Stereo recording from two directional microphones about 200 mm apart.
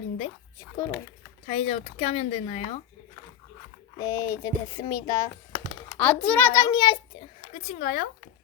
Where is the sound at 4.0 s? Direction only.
15° left (ahead or behind).